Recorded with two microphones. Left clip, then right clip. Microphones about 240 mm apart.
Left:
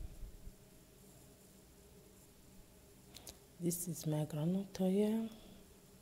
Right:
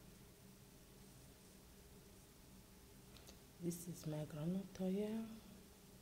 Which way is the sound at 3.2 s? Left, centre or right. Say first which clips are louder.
Left 7 dB; left.